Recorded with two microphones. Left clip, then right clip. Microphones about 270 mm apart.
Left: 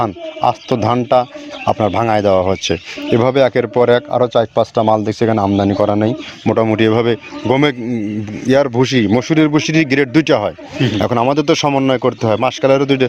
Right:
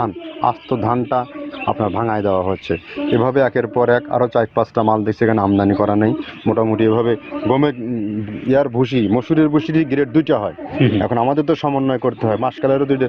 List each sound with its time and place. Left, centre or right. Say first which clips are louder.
0.0 s speech: left 3 dB; left
6.5 s speech: left 2 dB; left